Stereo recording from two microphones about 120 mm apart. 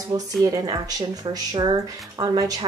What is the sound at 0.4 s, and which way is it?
Speech, 30° right (ahead or behind).